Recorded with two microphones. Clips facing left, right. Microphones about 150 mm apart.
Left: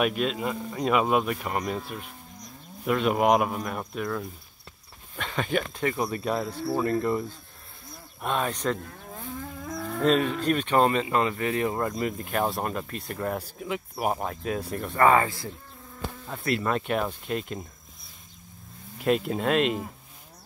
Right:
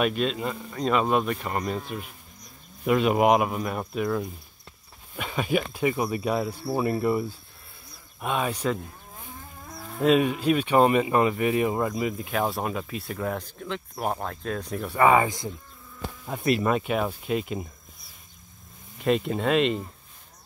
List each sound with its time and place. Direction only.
0.0 s speech: 5° left (ahead or behind)
9.0 s livestock: 65° left (ahead or behind); by 9.9 s 90° left
10.0 s speech: 10° right (ahead or behind)
14.9 s speech: 10° right (ahead or behind)
18.9 s speech: centre (ahead or behind)